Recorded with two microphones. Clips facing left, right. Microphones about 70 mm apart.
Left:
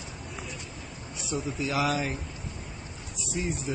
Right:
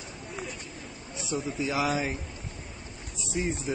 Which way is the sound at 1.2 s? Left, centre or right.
Right.